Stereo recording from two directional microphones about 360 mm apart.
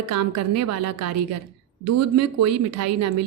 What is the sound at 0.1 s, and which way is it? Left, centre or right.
A woman's voice, right.